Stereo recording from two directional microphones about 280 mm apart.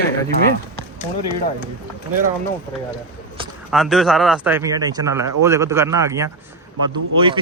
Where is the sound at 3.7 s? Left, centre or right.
Centre.